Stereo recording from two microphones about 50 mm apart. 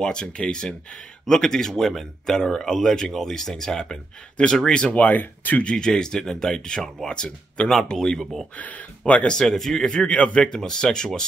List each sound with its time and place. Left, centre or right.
0.0 s speech: centre
4.9 s speech: left
5.6 s speech: centre
8.5 s speech: left
9.4 s speech: centre